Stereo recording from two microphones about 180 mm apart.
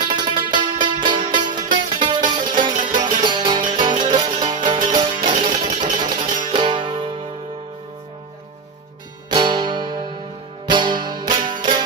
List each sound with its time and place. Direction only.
0.0 s music: 25° right (ahead or behind)
5.5 s a sound: 40° right (ahead or behind)
6.5 s music: 25° right (ahead or behind)
9.3 s music: 25° right (ahead or behind)